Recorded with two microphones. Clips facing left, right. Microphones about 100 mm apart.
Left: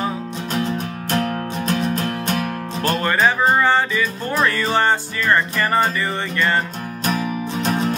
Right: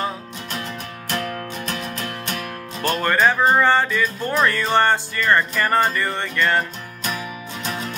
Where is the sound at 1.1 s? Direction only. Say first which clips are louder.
Left 5 dB; 40° left (ahead or behind).